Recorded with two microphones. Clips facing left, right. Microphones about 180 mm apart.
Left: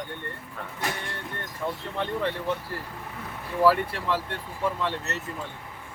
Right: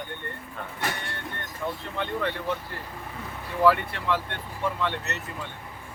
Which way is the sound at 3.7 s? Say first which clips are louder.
Left 1 dB; 35° left (ahead or behind).